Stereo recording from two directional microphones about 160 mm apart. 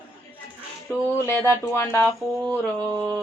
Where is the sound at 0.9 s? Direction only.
15° left (ahead or behind).